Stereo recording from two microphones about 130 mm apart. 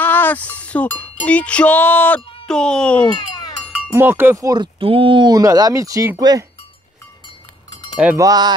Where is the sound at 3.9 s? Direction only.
15° right (ahead or behind).